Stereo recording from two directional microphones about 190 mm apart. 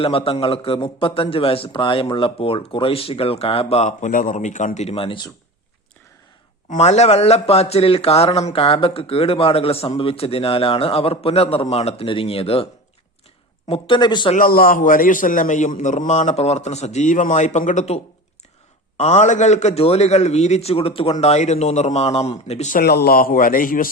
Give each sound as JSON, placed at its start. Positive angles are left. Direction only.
{"t": 0.0, "sound": "a man's voice", "side_deg": 30}
{"t": 6.7, "sound": "a man's voice", "side_deg": 35}
{"t": 13.7, "sound": "a man's voice", "side_deg": 30}
{"t": 14.3, "sound": "a man's voice", "side_deg": 50}
{"t": 22.8, "sound": "a man's voice", "side_deg": 55}